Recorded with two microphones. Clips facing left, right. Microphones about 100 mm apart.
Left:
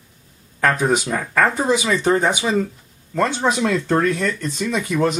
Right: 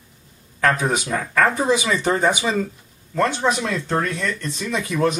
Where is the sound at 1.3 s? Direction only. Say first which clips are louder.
Even; 15° left (ahead or behind).